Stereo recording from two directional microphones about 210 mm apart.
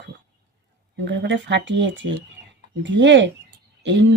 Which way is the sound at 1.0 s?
60° right (ahead or behind).